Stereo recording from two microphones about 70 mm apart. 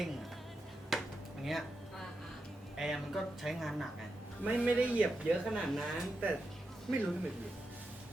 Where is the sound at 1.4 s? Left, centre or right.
Centre.